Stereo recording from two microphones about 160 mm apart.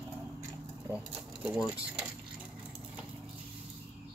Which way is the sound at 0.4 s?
15° right (ahead or behind).